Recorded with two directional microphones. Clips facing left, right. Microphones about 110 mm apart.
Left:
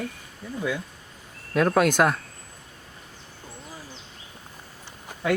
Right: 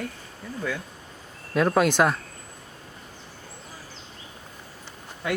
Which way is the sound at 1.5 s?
Centre (ahead or behind).